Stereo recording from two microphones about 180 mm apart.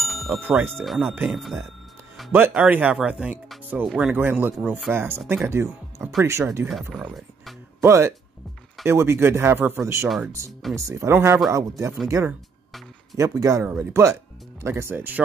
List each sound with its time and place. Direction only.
0.0 s music: centre (ahead or behind)
0.4 s speech: 10° right (ahead or behind)
0.7 s speech: centre (ahead or behind)
6.7 s speech: centre (ahead or behind)
7.8 s speech: 15° right (ahead or behind)
10.0 s speech: centre (ahead or behind)
10.7 s speech: 15° right (ahead or behind)